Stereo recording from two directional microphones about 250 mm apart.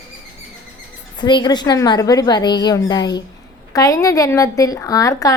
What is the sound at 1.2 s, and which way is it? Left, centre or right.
A woman's voice, centre.